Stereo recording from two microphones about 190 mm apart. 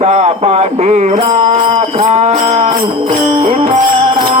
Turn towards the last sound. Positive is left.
turn(degrees=-30)  # may be behind; listen again after turning